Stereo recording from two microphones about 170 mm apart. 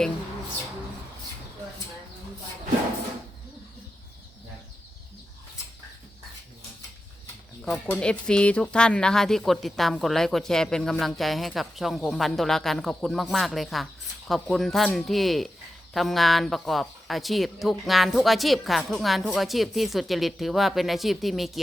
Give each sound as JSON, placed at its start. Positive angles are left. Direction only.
{"t": 7.6, "sound": "speech", "side_deg": 5}